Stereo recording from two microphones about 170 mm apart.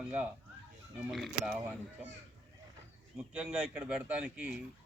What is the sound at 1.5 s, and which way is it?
Speech, 10° right (ahead or behind).